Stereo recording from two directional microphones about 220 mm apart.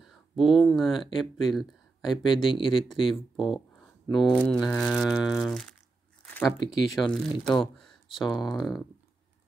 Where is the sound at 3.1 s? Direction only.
Centre (ahead or behind).